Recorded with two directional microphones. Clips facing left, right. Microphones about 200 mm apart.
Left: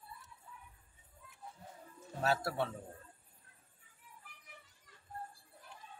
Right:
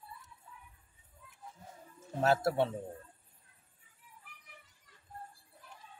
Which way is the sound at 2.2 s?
25° right (ahead or behind).